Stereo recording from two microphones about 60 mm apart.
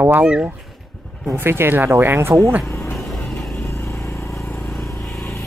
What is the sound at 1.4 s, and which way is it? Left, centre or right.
Speech, right.